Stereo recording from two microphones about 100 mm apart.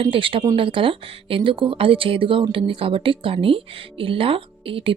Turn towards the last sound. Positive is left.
turn(degrees=-60)  # may be behind; listen again after turning